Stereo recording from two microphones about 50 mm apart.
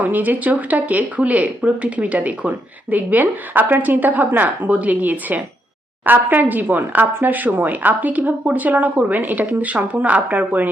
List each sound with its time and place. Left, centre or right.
0.0 s speech: right